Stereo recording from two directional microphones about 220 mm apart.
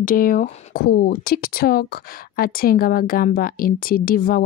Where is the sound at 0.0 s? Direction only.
40° left (ahead or behind).